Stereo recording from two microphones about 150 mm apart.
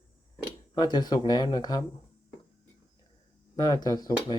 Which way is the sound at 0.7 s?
30° left (ahead or behind).